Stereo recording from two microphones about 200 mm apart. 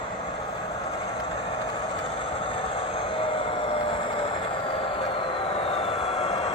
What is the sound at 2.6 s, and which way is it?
Vehicle, 30° left (ahead or behind).